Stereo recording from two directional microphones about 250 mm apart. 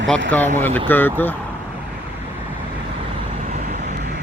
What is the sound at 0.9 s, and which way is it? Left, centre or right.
Speech, centre.